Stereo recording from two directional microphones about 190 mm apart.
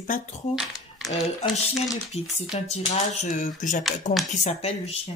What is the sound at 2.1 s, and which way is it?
Speech, 35° left (ahead or behind).